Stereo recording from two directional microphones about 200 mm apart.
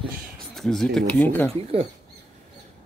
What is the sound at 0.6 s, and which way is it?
Speech, centre (ahead or behind).